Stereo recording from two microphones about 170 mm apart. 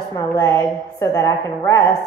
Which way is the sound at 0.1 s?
15° left (ahead or behind).